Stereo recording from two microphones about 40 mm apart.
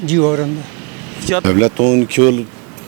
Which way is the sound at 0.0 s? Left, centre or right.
Centre.